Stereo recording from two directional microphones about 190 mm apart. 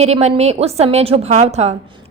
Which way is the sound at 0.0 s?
35° right (ahead or behind).